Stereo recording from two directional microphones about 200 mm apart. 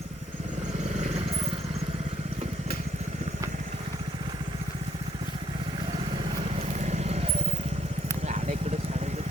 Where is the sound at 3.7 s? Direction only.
30° right (ahead or behind).